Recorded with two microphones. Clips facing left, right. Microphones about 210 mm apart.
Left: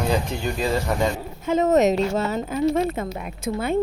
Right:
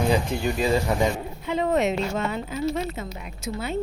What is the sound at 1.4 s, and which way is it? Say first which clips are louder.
Speech: left 5 dB; 45° left (ahead or behind).